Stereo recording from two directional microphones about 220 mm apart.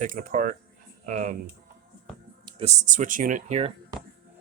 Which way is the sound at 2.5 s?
25° right (ahead or behind).